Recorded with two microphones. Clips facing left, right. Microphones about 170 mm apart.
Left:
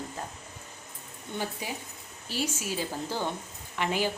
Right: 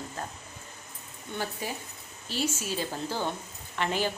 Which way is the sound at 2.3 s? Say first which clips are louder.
Right 1 dB; 10° left (ahead or behind).